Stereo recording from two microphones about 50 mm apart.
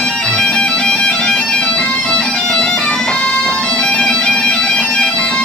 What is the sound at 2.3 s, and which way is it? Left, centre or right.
Bagpipes, centre.